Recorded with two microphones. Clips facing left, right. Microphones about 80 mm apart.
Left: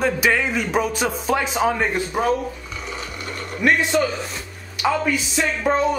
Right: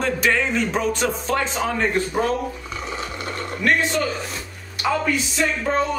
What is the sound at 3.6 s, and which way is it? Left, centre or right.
Speech, centre.